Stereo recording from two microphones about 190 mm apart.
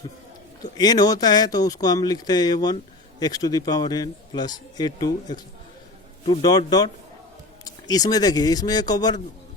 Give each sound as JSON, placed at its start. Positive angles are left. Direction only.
{"t": 0.6, "sound": "a man's voice", "side_deg": 20}
{"t": 6.4, "sound": "a man's voice", "side_deg": 20}